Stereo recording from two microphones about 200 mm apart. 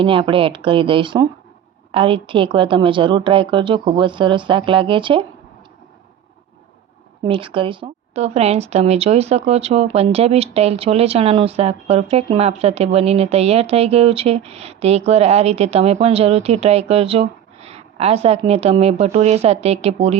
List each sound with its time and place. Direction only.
0.0 s a woman's voice: 25° right (ahead or behind)
7.3 s speech: 25° right (ahead or behind)